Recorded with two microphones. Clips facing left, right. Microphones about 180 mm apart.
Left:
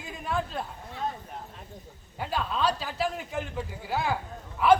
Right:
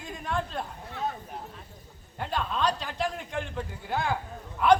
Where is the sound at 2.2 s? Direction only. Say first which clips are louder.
Even; 5° left (ahead or behind).